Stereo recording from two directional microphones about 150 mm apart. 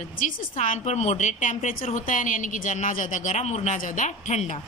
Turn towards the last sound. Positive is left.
turn(degrees=50)  # may be behind; listen again after turning